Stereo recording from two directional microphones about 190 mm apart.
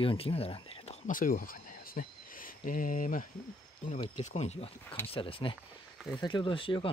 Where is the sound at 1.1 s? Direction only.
45° left (ahead or behind).